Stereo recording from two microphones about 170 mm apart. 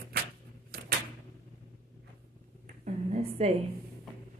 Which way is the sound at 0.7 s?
60° right (ahead or behind).